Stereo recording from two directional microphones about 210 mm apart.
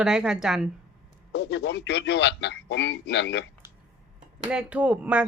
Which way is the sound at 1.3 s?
55° left (ahead or behind).